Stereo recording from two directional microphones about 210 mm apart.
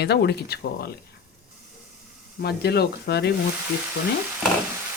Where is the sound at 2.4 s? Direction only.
50° left (ahead or behind).